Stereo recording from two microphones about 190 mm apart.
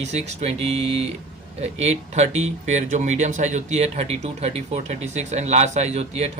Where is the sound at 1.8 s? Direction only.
35° right (ahead or behind).